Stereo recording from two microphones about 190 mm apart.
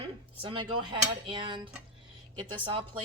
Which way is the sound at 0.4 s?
25° right (ahead or behind).